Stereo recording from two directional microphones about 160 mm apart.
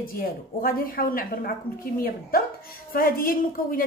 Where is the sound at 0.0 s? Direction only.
65° left (ahead or behind).